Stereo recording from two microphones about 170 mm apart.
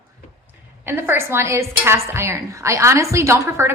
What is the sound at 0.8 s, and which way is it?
A woman's voice, 15° right (ahead or behind).